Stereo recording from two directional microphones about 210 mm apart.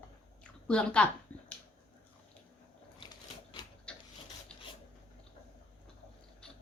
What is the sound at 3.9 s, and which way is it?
Filing, 5° left (ahead or behind).